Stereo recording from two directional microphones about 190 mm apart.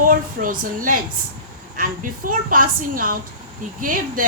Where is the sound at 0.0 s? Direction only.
45° right (ahead or behind).